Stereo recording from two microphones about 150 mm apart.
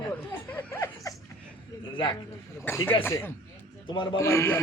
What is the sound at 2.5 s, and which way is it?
Speech, 15° left (ahead or behind).